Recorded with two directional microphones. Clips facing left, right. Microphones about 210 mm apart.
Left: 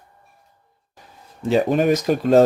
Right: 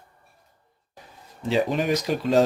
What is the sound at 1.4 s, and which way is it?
Speech, 50° left (ahead or behind).